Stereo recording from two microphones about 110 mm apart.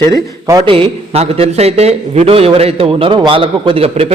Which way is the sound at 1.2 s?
75° right (ahead or behind).